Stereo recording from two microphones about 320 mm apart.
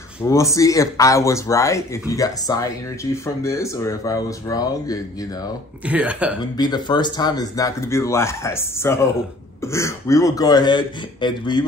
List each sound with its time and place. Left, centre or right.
0.2 s speech: centre
5.9 s speech: centre
6.5 s speech: centre